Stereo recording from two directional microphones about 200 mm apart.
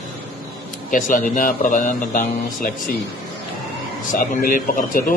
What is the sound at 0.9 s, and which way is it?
Speech, 40° left (ahead or behind).